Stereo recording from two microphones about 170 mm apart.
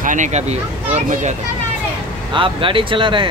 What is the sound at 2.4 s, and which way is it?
Speech, 30° right (ahead or behind).